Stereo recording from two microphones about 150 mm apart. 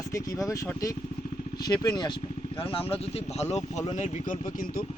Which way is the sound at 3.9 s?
55° left (ahead or behind).